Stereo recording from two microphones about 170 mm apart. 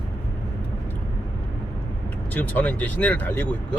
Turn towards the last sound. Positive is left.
turn(degrees=10)  # may be behind; listen again after turning